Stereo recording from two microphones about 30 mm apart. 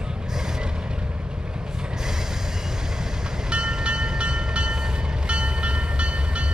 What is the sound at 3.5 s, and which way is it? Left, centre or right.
Train, right.